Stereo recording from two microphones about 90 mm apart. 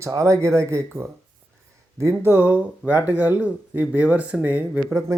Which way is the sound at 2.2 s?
25° right (ahead or behind).